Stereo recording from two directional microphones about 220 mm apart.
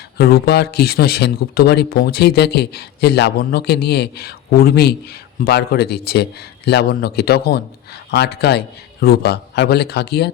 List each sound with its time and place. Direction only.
0.2 s speech: 45° left (ahead or behind)